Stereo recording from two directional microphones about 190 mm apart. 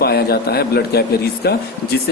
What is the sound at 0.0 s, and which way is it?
Speech, 55° left (ahead or behind).